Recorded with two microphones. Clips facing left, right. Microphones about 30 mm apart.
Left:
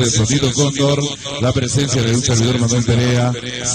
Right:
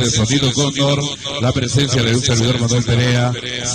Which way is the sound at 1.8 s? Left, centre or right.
Right.